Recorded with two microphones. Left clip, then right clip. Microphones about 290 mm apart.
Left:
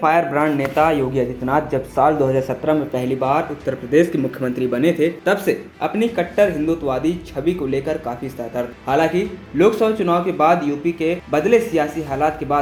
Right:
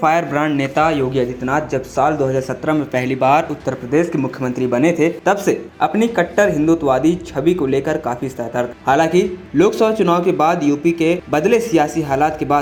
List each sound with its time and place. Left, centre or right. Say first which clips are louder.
0.0 s speech: even; right
1.1 s a man's voice: right 1 dB; centre
2.6 s speech: right 3 dB; right
4.5 s speech: right 3 dB; centre